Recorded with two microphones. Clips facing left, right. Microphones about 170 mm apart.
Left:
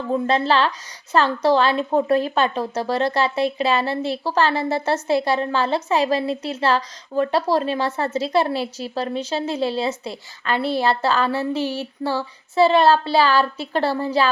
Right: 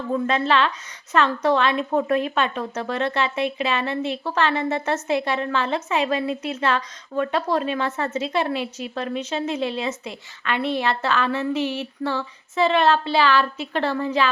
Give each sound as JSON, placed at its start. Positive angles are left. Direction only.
{"t": 0.1, "sound": "a woman's voice", "side_deg": 35}